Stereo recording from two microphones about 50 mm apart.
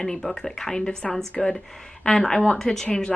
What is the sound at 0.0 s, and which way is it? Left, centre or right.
A woman's voice, centre.